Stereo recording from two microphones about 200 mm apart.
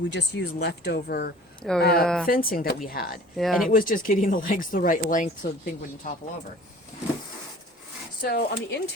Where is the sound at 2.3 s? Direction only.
45° left (ahead or behind).